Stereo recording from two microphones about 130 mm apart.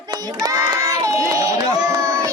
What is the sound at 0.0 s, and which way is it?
Child singing, 30° right (ahead or behind).